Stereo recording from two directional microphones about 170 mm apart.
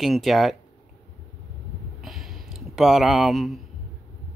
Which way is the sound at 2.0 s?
Centre (ahead or behind).